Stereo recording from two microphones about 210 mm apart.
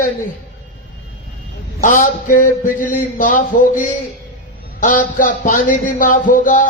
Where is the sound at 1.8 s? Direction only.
40° left (ahead or behind).